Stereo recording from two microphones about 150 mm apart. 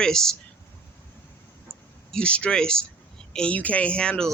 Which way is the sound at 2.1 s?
5° left (ahead or behind).